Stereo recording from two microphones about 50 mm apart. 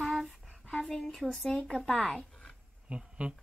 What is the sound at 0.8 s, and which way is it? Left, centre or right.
Speech, centre.